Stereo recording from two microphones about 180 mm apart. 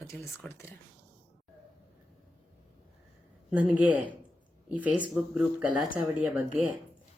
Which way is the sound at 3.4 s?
10° right (ahead or behind).